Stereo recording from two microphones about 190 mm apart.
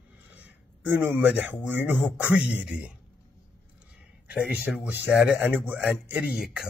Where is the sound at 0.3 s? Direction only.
10° right (ahead or behind).